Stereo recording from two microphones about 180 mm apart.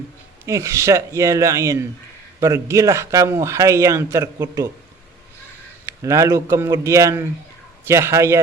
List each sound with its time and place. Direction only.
0.4 s a man's voice: 15° right (ahead or behind)
6.0 s a man's voice: 15° right (ahead or behind)